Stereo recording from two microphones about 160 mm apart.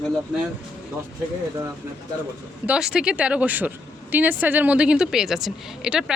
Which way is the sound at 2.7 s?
5° right (ahead or behind).